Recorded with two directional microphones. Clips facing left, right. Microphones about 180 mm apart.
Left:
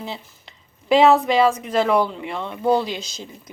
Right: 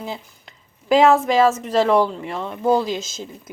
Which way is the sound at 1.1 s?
45° right (ahead or behind).